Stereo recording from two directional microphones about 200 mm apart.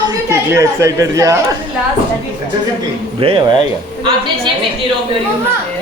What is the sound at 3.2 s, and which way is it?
Speech, 25° right (ahead or behind).